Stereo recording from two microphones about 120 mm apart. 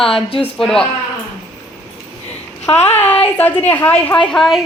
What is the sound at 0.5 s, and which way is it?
Speech, 5° left (ahead or behind).